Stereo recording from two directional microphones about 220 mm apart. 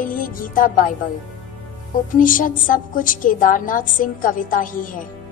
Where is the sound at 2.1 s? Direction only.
40° left (ahead or behind).